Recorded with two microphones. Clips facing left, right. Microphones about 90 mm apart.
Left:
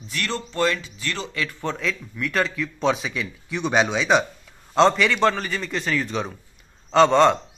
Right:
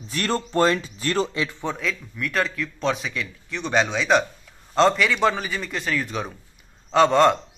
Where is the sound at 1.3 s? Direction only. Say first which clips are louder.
Right 1 dB; 20° right (ahead or behind).